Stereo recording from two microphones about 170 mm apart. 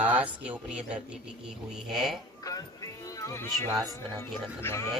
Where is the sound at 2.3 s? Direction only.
20° left (ahead or behind).